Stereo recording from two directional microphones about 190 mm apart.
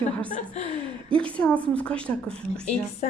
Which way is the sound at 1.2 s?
5° left (ahead or behind).